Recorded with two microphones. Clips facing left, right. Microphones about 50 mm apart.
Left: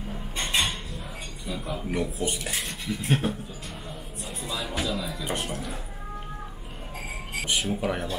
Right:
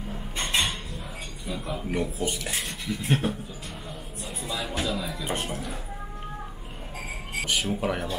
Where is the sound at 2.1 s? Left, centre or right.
Left.